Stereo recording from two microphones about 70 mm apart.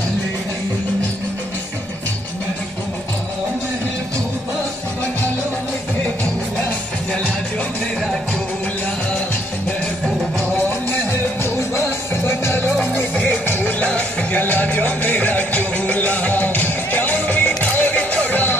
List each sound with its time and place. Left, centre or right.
12.3 s music: left